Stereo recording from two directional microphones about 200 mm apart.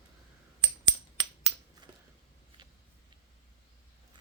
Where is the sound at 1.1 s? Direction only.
20° right (ahead or behind).